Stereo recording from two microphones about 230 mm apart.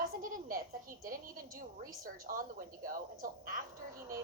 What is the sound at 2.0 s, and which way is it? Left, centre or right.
A woman's voice, right.